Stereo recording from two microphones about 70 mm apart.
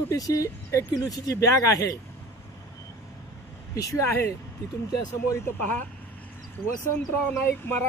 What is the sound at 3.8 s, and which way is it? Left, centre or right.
Speech, left.